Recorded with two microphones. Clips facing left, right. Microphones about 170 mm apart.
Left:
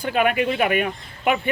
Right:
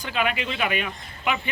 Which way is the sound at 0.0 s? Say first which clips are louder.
Left 6 dB; 50° left (ahead or behind).